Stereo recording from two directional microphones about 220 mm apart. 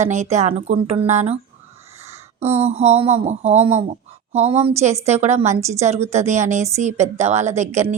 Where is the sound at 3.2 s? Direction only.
30° right (ahead or behind).